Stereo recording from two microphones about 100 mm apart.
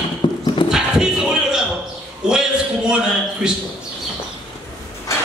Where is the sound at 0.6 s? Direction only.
5° right (ahead or behind).